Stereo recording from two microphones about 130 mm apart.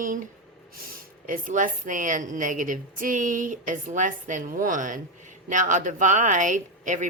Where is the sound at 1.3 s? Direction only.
90° right.